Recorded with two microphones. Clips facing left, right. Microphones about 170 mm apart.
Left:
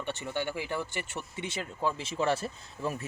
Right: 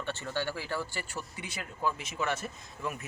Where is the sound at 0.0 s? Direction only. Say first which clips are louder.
Left 1 dB; 15° left (ahead or behind).